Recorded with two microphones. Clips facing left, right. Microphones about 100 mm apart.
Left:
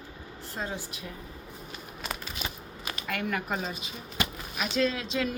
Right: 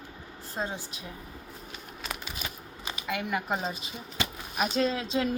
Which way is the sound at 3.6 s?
30° right (ahead or behind).